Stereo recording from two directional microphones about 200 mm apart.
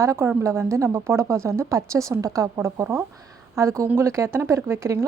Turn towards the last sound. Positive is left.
turn(degrees=-15)  # may be behind; listen again after turning